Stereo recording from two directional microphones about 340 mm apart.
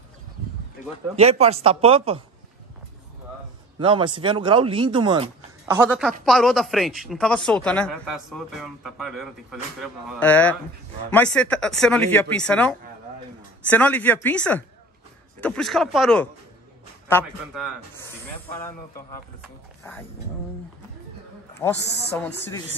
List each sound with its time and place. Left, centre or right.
1.1 s speech: centre
3.8 s speech: centre
21.6 s a man's voice: centre